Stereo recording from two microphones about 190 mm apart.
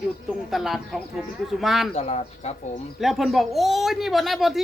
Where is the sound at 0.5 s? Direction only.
Centre (ahead or behind).